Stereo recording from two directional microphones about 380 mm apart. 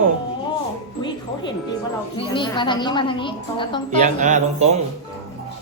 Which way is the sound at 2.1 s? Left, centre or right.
Centre.